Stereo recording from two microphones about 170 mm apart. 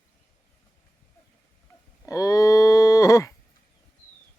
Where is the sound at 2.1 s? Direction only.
20° left (ahead or behind).